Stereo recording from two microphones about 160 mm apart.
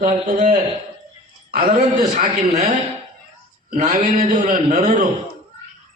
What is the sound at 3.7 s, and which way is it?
A man's voice, 45° right (ahead or behind).